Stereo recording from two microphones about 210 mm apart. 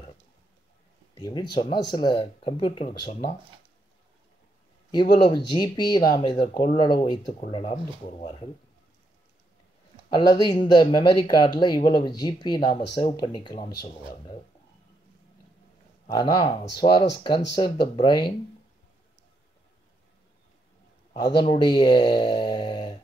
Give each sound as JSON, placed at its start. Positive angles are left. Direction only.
{"t": 1.1, "sound": "speech", "side_deg": 20}
{"t": 2.9, "sound": "speech", "side_deg": 50}
{"t": 5.2, "sound": "speech", "side_deg": 20}
{"t": 10.0, "sound": "speech", "side_deg": 20}
{"t": 16.1, "sound": "speech", "side_deg": 20}
{"t": 21.4, "sound": "speech", "side_deg": 20}